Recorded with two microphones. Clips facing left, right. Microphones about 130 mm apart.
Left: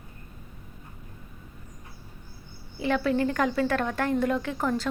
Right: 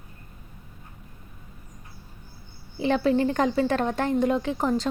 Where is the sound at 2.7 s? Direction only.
25° right (ahead or behind).